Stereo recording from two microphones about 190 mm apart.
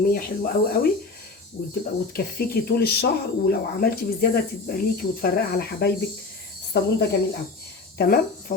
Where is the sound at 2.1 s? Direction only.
55° left (ahead or behind).